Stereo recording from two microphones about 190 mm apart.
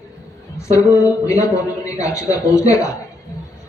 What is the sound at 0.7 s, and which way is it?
A man's voice, 15° left (ahead or behind).